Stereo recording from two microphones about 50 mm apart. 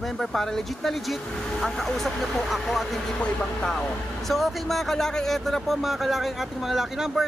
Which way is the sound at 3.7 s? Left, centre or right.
Centre.